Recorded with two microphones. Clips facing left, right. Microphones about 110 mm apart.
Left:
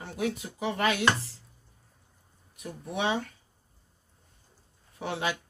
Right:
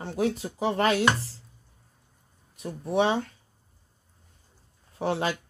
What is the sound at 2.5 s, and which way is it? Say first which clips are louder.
Speech: right 9 dB; 30° right (ahead or behind).